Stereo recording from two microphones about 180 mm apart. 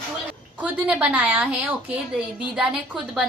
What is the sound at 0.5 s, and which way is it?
A woman's voice, 10° right (ahead or behind).